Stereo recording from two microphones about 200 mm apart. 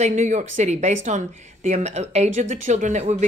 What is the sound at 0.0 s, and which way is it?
Speech, 35° right (ahead or behind).